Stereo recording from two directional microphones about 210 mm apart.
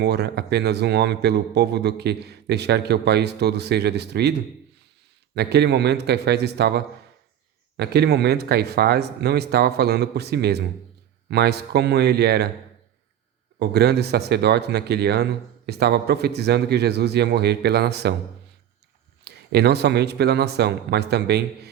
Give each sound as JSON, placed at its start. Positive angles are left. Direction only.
{"t": 0.0, "sound": "speech", "side_deg": -50}
{"t": 13.6, "sound": "speech", "side_deg": -50}
{"t": 19.2, "sound": "speech", "side_deg": -50}